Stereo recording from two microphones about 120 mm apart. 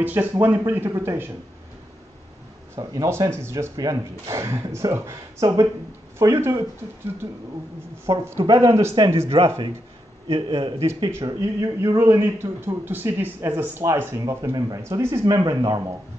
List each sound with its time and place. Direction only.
0.0 s a man's voice: 15° right (ahead or behind)
2.7 s a man's voice: 30° right (ahead or behind)
8.1 s a man's voice: 25° right (ahead or behind)
9.3 s a man's voice: 45° right (ahead or behind)
11.2 s a man's voice: 30° right (ahead or behind)
15.2 s speech: 35° right (ahead or behind)